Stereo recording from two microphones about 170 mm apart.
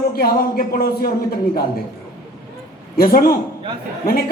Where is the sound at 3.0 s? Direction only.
60° left (ahead or behind).